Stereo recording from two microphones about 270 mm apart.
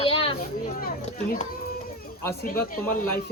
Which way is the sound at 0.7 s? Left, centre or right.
Left.